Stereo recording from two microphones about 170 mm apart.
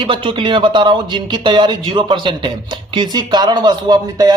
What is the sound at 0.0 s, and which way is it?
Speech, 30° right (ahead or behind).